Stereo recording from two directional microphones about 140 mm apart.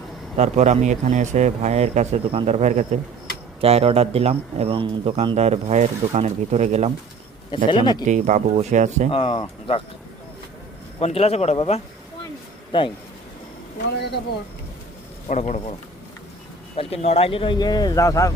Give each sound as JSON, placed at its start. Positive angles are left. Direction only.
{"t": 0.3, "sound": "a man's voice", "side_deg": -50}
{"t": 7.5, "sound": "speech", "side_deg": 35}
{"t": 8.0, "sound": "a man's voice", "side_deg": -60}
{"t": 9.1, "sound": "speech", "side_deg": 40}
{"t": 11.0, "sound": "a man's voice", "side_deg": 45}
{"t": 12.7, "sound": "speech", "side_deg": 35}
{"t": 15.3, "sound": "speech", "side_deg": 55}
{"t": 16.7, "sound": "speech", "side_deg": 45}